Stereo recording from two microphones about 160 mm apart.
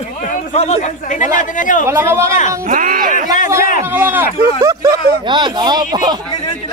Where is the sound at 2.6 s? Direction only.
60° right (ahead or behind).